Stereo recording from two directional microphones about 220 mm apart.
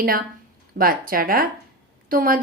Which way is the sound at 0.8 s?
40° right (ahead or behind).